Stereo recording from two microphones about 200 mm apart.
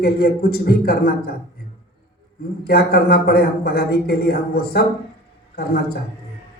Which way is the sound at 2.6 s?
50° left (ahead or behind).